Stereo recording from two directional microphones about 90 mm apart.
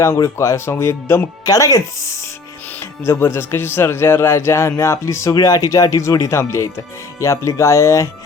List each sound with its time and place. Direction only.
0.0 s speech: 35° left (ahead or behind)